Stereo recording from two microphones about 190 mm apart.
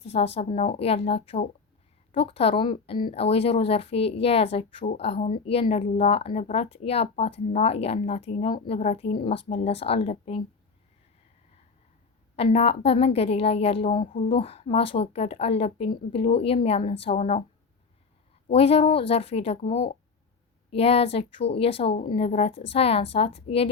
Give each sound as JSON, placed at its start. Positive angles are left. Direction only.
{"t": 0.0, "sound": "a woman's voice", "side_deg": 30}
{"t": 12.4, "sound": "a woman's voice", "side_deg": 30}
{"t": 18.4, "sound": "a woman's voice", "side_deg": 30}